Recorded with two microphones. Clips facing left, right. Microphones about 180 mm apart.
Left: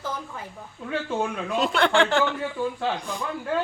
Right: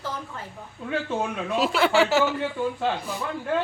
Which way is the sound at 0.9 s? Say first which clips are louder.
Even; centre (ahead or behind).